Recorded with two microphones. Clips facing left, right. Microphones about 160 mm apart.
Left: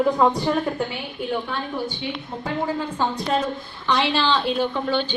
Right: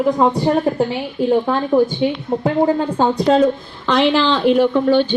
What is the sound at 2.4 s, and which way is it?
Speech, 60° right (ahead or behind).